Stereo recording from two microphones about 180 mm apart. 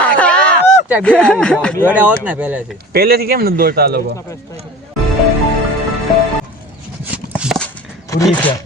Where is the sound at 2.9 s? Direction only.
60° right (ahead or behind).